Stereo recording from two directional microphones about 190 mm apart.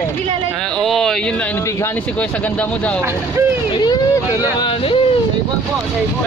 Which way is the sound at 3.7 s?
20° left (ahead or behind).